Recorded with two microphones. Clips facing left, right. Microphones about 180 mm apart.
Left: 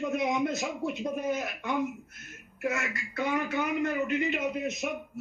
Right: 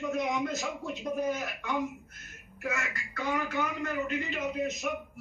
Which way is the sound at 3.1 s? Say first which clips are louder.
Left 2 dB; 15° left (ahead or behind).